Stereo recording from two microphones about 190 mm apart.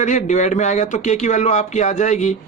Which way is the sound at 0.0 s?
40° left (ahead or behind).